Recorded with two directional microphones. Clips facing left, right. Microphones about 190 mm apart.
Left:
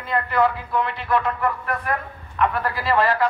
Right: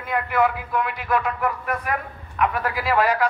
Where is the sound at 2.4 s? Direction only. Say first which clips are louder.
Left 1 dB; 10° right (ahead or behind).